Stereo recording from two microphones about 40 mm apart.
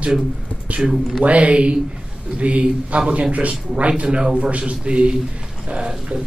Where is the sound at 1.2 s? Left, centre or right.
Right.